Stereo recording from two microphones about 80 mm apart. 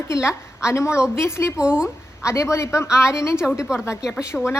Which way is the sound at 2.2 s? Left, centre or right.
Left.